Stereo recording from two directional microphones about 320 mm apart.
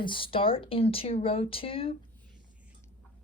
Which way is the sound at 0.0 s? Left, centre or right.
Centre.